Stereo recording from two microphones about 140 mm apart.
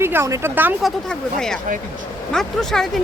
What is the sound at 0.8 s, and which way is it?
Speech, 5° left (ahead or behind).